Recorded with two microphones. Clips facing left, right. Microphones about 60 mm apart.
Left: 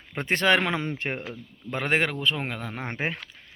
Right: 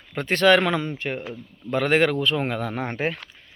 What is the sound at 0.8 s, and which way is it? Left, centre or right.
Speech, left.